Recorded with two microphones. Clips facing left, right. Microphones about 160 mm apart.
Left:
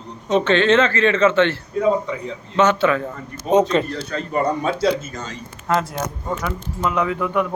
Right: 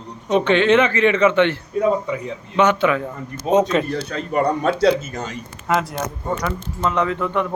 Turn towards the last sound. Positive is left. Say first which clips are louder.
# even
turn(degrees=10)  # may be behind; listen again after turning